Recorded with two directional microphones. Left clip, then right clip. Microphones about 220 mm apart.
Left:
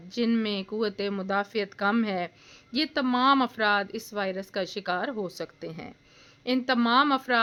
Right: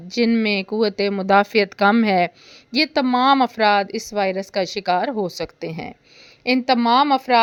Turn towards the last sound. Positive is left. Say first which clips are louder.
# right 7 dB
turn(degrees=-25)  # may be behind; listen again after turning